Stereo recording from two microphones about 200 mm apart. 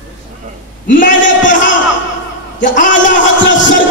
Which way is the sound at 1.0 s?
40° left (ahead or behind).